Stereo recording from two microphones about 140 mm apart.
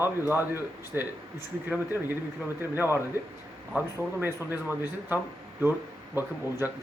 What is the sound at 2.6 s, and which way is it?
Speech, 15° right (ahead or behind).